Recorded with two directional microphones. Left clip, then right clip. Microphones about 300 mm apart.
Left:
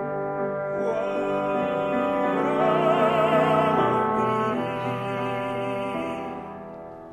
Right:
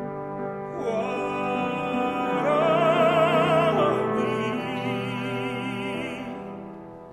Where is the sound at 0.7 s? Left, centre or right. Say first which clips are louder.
Right 1 dB; right.